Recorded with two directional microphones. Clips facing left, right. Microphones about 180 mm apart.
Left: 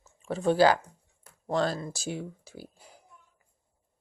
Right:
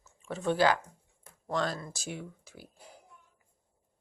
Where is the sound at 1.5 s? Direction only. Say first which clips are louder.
Left 4 dB; 30° left (ahead or behind).